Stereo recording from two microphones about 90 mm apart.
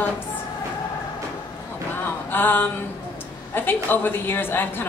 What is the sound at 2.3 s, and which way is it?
Speech, 25° left (ahead or behind).